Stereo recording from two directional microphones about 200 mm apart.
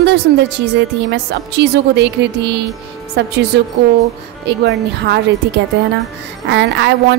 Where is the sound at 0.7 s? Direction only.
55° right (ahead or behind).